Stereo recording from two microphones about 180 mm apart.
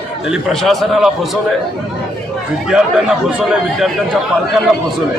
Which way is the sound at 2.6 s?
5° right (ahead or behind).